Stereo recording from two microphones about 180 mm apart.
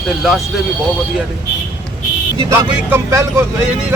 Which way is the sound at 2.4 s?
20° right (ahead or behind).